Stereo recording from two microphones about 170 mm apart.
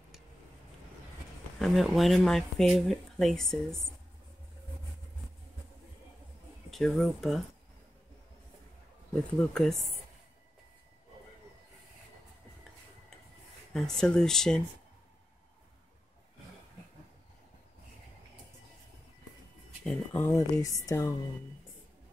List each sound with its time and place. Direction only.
1.6 s speech: centre (ahead or behind)
6.7 s speech: centre (ahead or behind)
9.4 s speech: 5° left (ahead or behind)
13.7 s speech: 5° left (ahead or behind)
19.8 s speech: 10° left (ahead or behind)